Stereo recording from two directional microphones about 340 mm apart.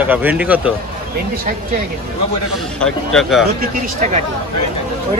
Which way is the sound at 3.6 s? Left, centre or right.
Right.